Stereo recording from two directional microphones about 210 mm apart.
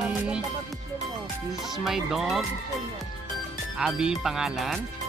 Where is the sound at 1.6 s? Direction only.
Centre (ahead or behind).